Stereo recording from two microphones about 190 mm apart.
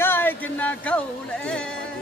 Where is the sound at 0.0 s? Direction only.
10° left (ahead or behind).